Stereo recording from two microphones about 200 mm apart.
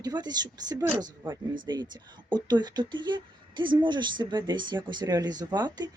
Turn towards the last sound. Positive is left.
turn(degrees=-20)  # may be behind; listen again after turning